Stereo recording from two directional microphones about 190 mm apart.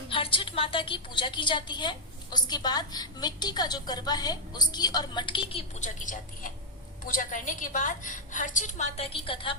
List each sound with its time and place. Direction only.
0.1 s a woman's voice: 30° left (ahead or behind)